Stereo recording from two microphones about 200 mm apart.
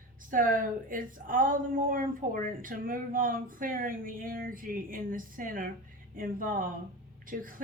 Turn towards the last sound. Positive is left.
turn(degrees=-45)  # may be behind; listen again after turning